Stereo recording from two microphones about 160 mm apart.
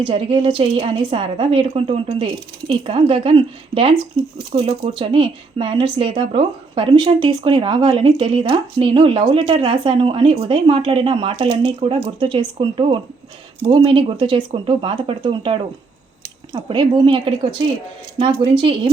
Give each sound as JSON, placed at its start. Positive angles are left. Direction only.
{"t": 0.0, "sound": "speech", "side_deg": -30}
{"t": 18.7, "sound": "speech", "side_deg": -30}